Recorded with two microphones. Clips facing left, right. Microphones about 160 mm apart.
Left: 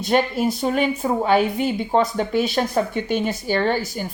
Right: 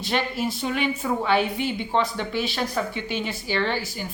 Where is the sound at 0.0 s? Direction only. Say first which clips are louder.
Left 6 dB; 45° left (ahead or behind).